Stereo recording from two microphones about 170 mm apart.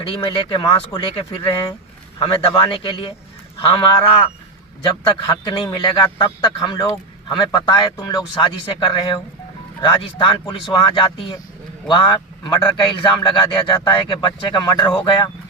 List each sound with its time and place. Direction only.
0.1 s a man's voice: 30° left (ahead or behind)
2.1 s a man's voice: 30° left (ahead or behind)
3.6 s a sound: 30° left (ahead or behind)
4.8 s a man's voice: 30° left (ahead or behind)